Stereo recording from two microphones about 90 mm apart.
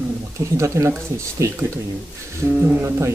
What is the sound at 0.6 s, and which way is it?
Speech, 30° right (ahead or behind).